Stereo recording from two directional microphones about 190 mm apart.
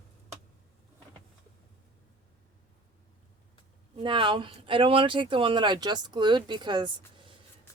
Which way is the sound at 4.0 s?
25° right (ahead or behind).